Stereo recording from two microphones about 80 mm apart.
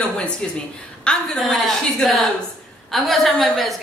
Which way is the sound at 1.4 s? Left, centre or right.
Centre.